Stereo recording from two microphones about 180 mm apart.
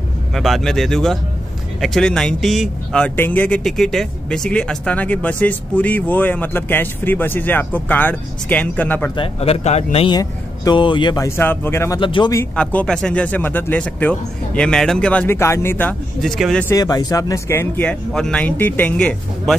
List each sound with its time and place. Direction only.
0.3 s speech: centre (ahead or behind)
9.1 s speech: 30° left (ahead or behind)
10.1 s speech: 25° left (ahead or behind)
12.0 s speech: 25° left (ahead or behind)
12.5 s speech: 5° left (ahead or behind)
16.6 s speech: 20° left (ahead or behind)